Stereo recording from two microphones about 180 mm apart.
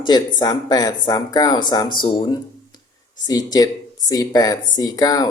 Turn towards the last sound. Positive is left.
turn(degrees=20)  # may be behind; listen again after turning